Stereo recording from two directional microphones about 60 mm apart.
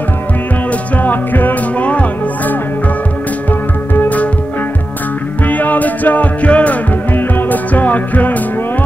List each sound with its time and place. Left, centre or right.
0.9 s music: left
5.5 s music: left